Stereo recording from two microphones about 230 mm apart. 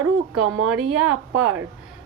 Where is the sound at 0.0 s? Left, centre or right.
Right.